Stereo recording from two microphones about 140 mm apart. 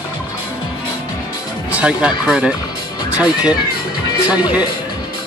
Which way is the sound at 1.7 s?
5° right (ahead or behind).